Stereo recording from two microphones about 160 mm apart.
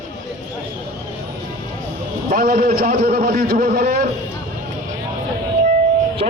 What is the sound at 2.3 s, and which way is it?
A man's voice, 60° right (ahead or behind).